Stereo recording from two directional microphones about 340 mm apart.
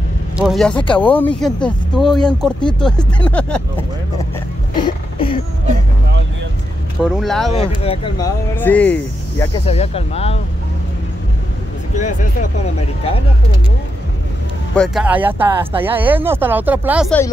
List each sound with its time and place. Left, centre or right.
0.4 s speech: centre
4.7 s throat clearing: centre
7.1 s speech: centre
7.5 s speech: centre
9.7 s speech: centre
12.0 s speech: left
14.8 s speech: centre